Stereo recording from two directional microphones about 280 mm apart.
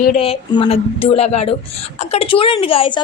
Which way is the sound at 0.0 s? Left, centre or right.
Left.